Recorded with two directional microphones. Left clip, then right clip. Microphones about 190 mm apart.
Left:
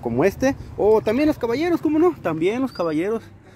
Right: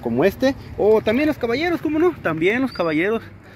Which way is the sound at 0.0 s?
20° left (ahead or behind).